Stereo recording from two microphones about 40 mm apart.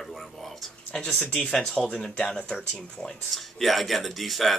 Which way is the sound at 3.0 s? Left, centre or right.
Centre.